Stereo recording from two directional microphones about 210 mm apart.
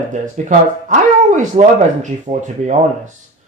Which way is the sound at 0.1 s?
35° right (ahead or behind).